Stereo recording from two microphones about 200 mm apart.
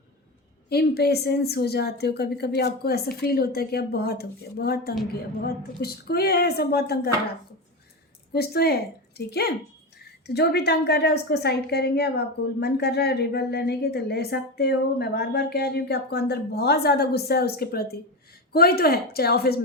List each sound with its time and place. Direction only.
0.7 s a woman's voice: 55° left (ahead or behind)
8.3 s a woman's voice: 50° left (ahead or behind)